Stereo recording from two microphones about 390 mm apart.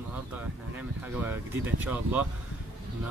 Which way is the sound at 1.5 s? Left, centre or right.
Centre.